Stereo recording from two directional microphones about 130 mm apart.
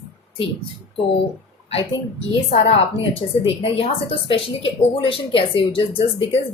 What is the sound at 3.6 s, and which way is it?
Speech, 45° left (ahead or behind).